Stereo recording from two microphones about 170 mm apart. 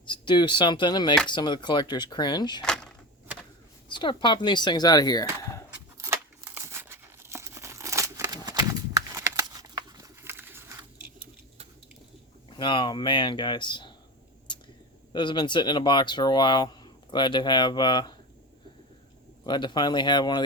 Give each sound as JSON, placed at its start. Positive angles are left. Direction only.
{"t": 0.0, "sound": "speech", "side_deg": 30}
{"t": 2.6, "sound": "a sound", "side_deg": 5}
{"t": 3.8, "sound": "speech", "side_deg": 30}
{"t": 6.0, "sound": "tearing", "side_deg": -15}
{"t": 12.5, "sound": "speech", "side_deg": 30}
{"t": 15.1, "sound": "speech", "side_deg": 25}
{"t": 19.5, "sound": "speech", "side_deg": 25}